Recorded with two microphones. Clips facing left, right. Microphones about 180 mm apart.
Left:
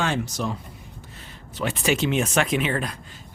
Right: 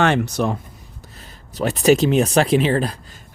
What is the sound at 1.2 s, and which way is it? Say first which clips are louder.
Speech: right 6 dB; 40° right (ahead or behind).